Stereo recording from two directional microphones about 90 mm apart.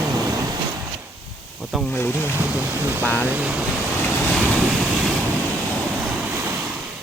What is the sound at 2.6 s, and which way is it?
Speech, 25° right (ahead or behind).